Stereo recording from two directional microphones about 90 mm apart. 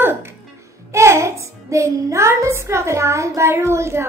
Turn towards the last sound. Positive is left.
turn(degrees=-30)  # may be behind; listen again after turning